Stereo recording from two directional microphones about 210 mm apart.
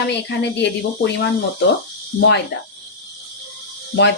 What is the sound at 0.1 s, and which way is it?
Speech, 55° left (ahead or behind).